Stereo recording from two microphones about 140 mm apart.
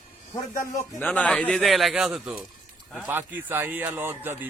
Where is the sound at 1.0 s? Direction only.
10° left (ahead or behind).